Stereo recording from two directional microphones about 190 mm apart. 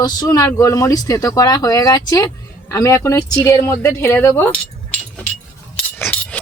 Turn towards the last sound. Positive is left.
turn(degrees=5)  # may be behind; listen again after turning